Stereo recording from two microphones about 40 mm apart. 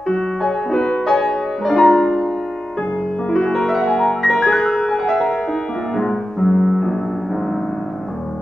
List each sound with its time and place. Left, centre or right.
0.4 s music: centre
3.3 s music: centre
4.1 s music: centre